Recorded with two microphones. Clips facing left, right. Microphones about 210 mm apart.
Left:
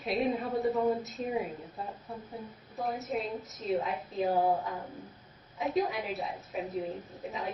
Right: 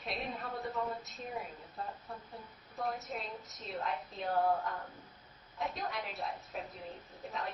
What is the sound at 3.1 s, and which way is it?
A woman's voice, centre (ahead or behind).